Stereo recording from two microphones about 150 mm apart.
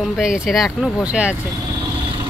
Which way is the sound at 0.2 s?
5° right (ahead or behind).